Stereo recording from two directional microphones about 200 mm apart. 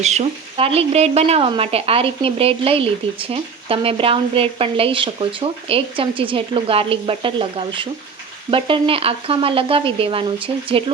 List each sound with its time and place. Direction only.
0.0 s speech: 35° right (ahead or behind)